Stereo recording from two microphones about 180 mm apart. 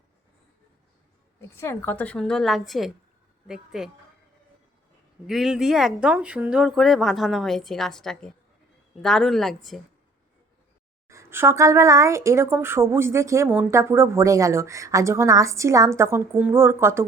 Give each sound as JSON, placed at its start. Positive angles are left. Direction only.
{"t": 1.4, "sound": "speech", "side_deg": 15}
{"t": 5.2, "sound": "speech", "side_deg": 0}
{"t": 11.1, "sound": "a woman's voice", "side_deg": -15}